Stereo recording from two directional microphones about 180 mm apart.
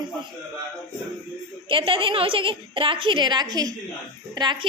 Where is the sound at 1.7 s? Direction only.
30° right (ahead or behind).